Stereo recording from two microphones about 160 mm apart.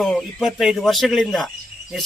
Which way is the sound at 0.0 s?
Centre (ahead or behind).